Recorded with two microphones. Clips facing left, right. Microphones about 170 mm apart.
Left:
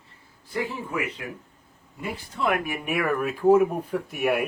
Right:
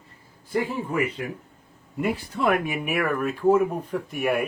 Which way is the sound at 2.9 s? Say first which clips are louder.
Left 1 dB; centre (ahead or behind).